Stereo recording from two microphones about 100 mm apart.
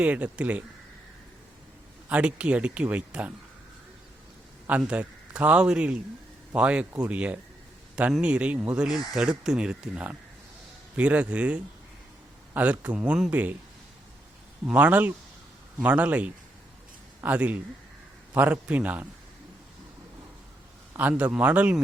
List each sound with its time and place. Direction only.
0.0 s speech: 15° right (ahead or behind)
2.0 s speech: 15° right (ahead or behind)
4.8 s speech: 10° right (ahead or behind)
14.6 s speech: 15° right (ahead or behind)
20.9 s a man's voice: 20° right (ahead or behind)